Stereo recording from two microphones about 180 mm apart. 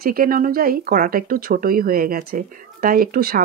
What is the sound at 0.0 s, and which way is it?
Speech, 55° right (ahead or behind).